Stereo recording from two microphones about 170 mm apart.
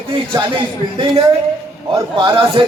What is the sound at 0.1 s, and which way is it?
A man's voice, 25° right (ahead or behind).